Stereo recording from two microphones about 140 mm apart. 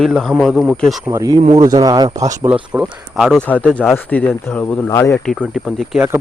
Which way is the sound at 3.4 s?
10° left (ahead or behind).